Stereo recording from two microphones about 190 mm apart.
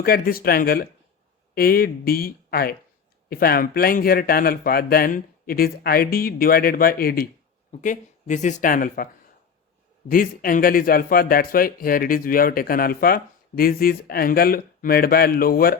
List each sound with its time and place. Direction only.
0.0 s speech: 50° left (ahead or behind)
7.7 s speech: 40° left (ahead or behind)
10.1 s speech: 50° left (ahead or behind)